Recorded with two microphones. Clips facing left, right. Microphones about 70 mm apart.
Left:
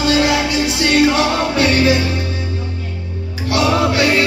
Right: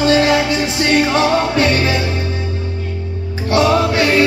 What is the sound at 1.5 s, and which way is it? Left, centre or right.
Music, right.